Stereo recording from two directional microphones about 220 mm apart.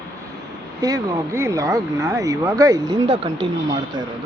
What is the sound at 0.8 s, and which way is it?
Speech, 15° right (ahead or behind).